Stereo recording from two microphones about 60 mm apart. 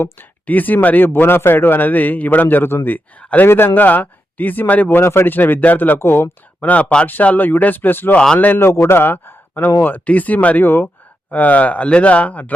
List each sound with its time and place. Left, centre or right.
0.4 s speech: left
3.2 s speech: left
3.4 s speech: left
6.6 s a man's voice: left